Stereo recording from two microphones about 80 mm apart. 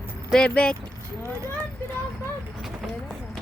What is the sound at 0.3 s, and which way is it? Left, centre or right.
Speech, centre.